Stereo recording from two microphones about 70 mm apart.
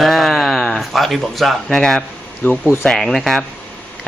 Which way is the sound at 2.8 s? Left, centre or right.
Centre.